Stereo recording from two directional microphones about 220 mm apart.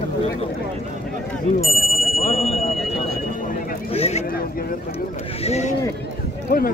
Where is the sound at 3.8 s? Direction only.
25° left (ahead or behind).